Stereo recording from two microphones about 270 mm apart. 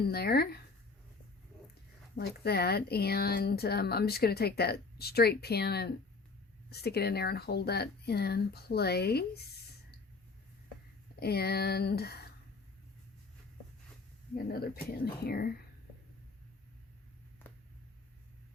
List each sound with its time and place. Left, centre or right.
0.1 s speech: left
2.1 s speech: left
11.2 s speech: left
14.3 s speech: left